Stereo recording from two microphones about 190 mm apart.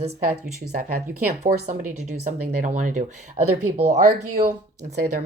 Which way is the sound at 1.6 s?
40° right (ahead or behind).